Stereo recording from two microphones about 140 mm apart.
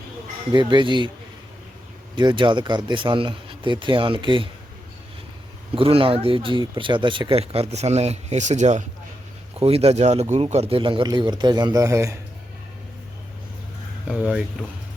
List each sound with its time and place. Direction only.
0.5 s speech: 35° right (ahead or behind)
2.1 s speech: 35° right (ahead or behind)
5.7 s speech: 40° right (ahead or behind); by 8.8 s 55° right (ahead or behind)
9.6 s speech: 45° right (ahead or behind); by 12.1 s 20° right (ahead or behind)
14.1 s speech: 10° right (ahead or behind)